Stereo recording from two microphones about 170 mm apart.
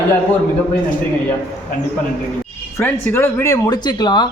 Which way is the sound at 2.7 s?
10° left (ahead or behind).